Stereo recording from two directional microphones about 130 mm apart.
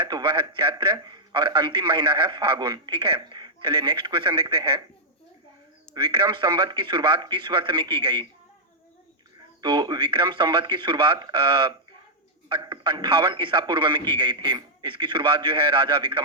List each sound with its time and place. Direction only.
0.0 s a man's voice: 35° right (ahead or behind)
5.9 s a man's voice: 35° right (ahead or behind)
9.6 s a man's voice: 35° right (ahead or behind)